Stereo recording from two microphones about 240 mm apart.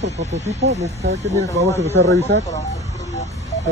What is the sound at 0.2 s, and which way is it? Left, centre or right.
Speech, right.